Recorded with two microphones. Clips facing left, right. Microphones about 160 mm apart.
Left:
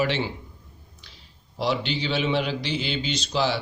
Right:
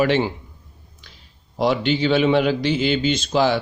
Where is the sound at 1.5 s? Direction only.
50° right (ahead or behind).